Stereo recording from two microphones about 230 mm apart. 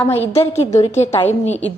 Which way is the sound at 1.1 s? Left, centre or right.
Centre.